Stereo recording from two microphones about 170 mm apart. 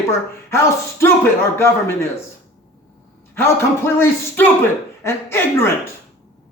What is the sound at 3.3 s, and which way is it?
A man's voice, 15° left (ahead or behind).